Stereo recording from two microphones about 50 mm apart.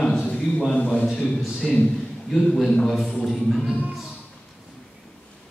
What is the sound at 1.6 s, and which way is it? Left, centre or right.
A man's voice, centre.